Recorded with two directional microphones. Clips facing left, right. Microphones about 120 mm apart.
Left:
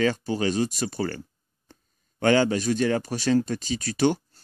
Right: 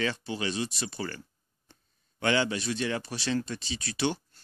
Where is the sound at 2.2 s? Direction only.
45° left (ahead or behind).